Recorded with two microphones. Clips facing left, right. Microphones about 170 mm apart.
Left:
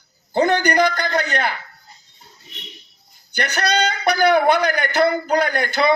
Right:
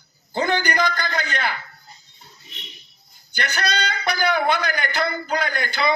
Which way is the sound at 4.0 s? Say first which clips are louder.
Left 6 dB; 60° left (ahead or behind).